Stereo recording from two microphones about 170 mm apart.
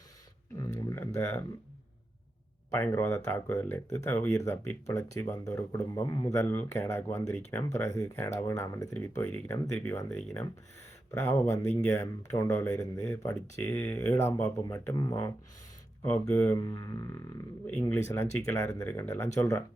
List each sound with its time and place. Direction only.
0.9 s a sound: 15° left (ahead or behind)
2.6 s speech: 15° left (ahead or behind)
16.6 s didgeridoo: 25° left (ahead or behind)
17.8 s speech: 15° left (ahead or behind)